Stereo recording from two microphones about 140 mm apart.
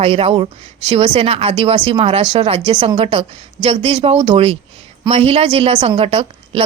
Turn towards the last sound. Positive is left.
turn(degrees=-45)  # may be behind; listen again after turning